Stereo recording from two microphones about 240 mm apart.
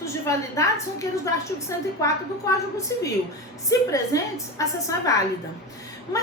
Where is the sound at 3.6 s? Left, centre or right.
Centre.